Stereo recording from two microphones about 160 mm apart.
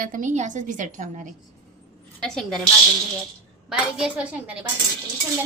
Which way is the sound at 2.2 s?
5° left (ahead or behind).